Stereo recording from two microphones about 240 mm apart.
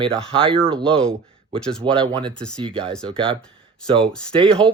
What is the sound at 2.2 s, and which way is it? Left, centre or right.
Speech, centre.